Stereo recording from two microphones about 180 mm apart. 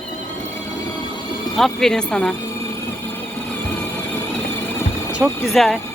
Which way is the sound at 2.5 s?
15° left (ahead or behind).